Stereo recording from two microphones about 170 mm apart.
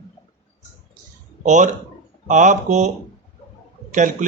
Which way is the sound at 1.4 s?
45° right (ahead or behind).